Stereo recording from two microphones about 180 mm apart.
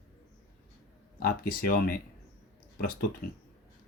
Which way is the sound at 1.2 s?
55° left (ahead or behind).